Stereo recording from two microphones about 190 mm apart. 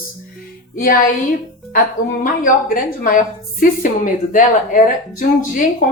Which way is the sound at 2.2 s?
45° left (ahead or behind).